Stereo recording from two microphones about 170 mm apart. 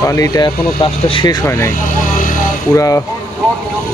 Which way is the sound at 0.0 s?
20° left (ahead or behind).